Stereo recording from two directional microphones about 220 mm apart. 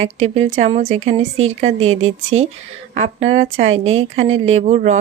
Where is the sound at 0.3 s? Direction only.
30° right (ahead or behind).